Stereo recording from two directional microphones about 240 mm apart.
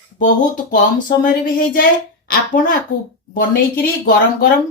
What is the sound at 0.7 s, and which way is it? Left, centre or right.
Speech, left.